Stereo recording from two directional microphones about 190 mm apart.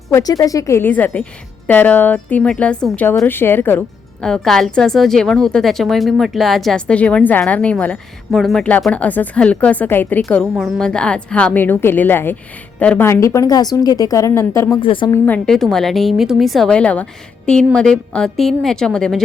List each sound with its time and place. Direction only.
0.1 s a woman's voice: 20° left (ahead or behind)
10.2 s a woman's voice: centre (ahead or behind)
14.8 s a woman's voice: 25° left (ahead or behind)
15.1 s a woman's voice: 5° left (ahead or behind)